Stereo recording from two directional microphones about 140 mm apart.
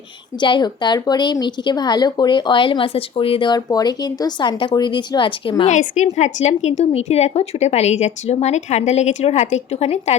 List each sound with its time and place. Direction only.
0.3 s a woman's voice: 35° left (ahead or behind)
5.6 s a woman's voice: 60° left (ahead or behind)